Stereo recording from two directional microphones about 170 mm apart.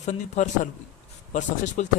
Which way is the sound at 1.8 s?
45° left (ahead or behind).